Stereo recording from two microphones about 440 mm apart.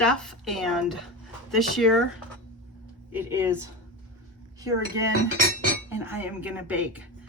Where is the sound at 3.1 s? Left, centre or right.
Centre.